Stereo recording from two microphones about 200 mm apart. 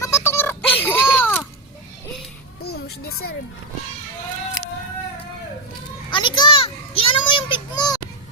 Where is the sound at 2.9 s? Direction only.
90° left.